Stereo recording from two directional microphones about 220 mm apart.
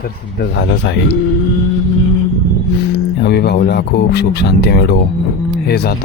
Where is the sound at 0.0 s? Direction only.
50° left (ahead or behind).